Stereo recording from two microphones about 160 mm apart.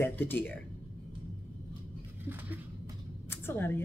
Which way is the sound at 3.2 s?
15° left (ahead or behind).